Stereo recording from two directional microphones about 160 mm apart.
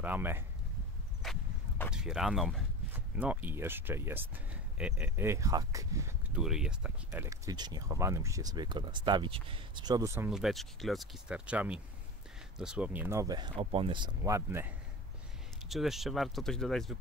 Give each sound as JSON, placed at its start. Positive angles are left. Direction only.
{"t": 0.0, "sound": "speech", "side_deg": -10}
{"t": 1.2, "sound": "a sound", "side_deg": 0}
{"t": 1.9, "sound": "speech", "side_deg": -5}
{"t": 6.3, "sound": "speech", "side_deg": -5}
{"t": 7.1, "sound": "speech", "side_deg": -20}
{"t": 10.3, "sound": "speech", "side_deg": 0}
{"t": 15.7, "sound": "speech", "side_deg": 0}